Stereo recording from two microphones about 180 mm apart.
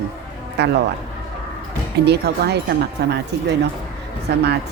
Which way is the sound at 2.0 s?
65° right (ahead or behind).